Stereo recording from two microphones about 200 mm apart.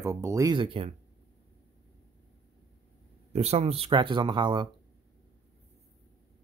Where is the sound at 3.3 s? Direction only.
30° right (ahead or behind).